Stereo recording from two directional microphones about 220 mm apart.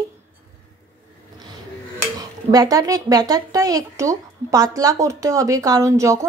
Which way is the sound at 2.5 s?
15° right (ahead or behind).